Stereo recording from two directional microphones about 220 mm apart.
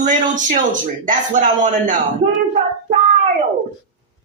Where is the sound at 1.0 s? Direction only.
35° right (ahead or behind).